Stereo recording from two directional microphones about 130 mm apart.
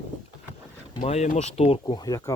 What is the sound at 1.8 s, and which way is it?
Speech, 30° left (ahead or behind).